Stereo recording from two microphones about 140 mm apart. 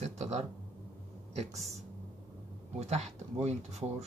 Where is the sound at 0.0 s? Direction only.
50° right (ahead or behind).